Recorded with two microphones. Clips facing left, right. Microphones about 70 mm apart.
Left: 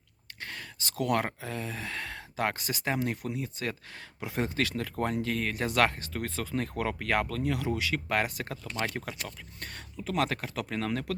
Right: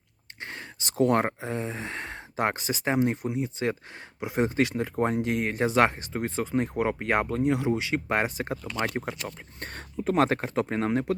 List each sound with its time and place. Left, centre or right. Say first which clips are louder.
0.4 s speech: right 2 dB; right